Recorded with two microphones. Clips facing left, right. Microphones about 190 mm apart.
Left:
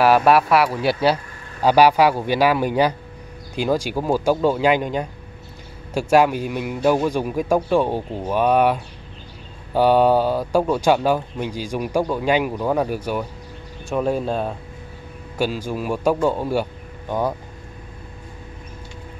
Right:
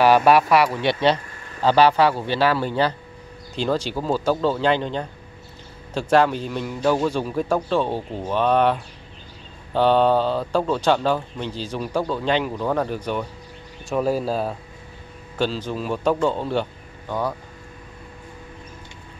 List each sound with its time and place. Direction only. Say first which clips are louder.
0.0 s a man's voice: even; centre (ahead or behind)
9.8 s a man's voice: left 2 dB; 10° left (ahead or behind)
15.3 s a man's voice: left 1 dB; 10° left (ahead or behind)